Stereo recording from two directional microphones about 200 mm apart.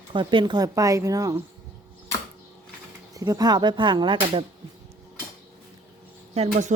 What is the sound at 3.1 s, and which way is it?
Speech, 15° right (ahead or behind).